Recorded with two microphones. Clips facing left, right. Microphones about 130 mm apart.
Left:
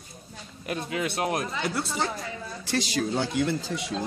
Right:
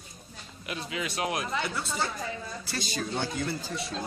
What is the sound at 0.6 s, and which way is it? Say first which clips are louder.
Speech: left 5 dB; 50° left (ahead or behind).